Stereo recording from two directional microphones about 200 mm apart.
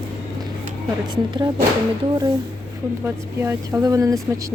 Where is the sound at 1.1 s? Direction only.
20° right (ahead or behind).